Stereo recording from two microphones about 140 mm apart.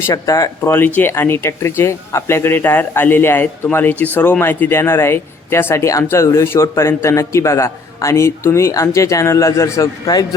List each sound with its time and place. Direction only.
0.0 s speech: 25° left (ahead or behind)